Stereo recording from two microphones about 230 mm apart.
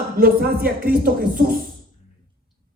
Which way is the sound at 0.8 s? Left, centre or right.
Right.